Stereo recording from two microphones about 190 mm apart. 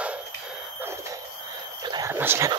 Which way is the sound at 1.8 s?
20° right (ahead or behind).